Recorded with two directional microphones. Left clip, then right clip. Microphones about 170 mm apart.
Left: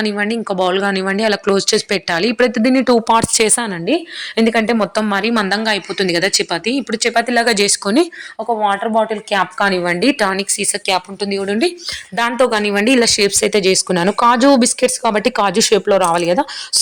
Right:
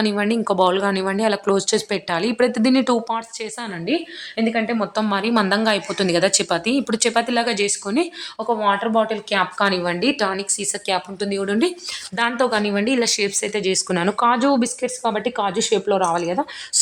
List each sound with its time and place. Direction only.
0.0 s speech: 5° left (ahead or behind)
3.1 s a woman's voice: 75° left (ahead or behind)
5.0 s speech: 25° left (ahead or behind)
5.5 s speech: 5° left (ahead or behind)
7.1 s speech: 25° left (ahead or behind)
7.4 s a woman's voice: 60° left (ahead or behind)
8.6 s speech: 20° left (ahead or behind)
12.1 s speech: 35° left (ahead or behind)